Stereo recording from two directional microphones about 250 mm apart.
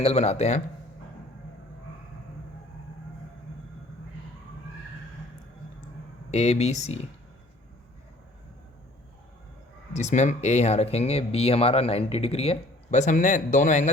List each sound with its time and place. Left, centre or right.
0.0 s speech: left
6.3 s speech: left
9.9 s speech: left